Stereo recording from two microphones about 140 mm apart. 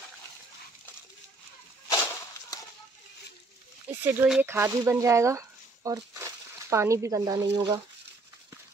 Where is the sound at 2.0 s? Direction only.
20° left (ahead or behind).